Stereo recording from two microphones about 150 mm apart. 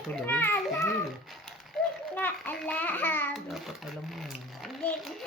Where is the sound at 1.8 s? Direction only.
5° left (ahead or behind).